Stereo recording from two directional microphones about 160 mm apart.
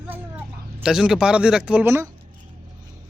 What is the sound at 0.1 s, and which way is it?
Speech, 10° right (ahead or behind).